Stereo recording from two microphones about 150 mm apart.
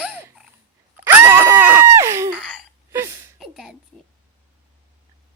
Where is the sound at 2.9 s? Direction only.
15° right (ahead or behind).